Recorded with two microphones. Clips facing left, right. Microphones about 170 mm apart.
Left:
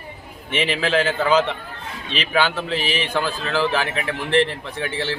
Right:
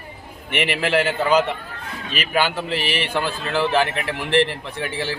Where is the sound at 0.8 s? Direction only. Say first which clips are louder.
Even; 15° right (ahead or behind).